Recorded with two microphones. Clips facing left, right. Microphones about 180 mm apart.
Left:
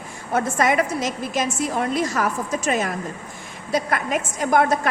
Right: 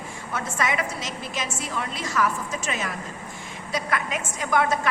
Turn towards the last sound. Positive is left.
turn(degrees=45)  # may be behind; listen again after turning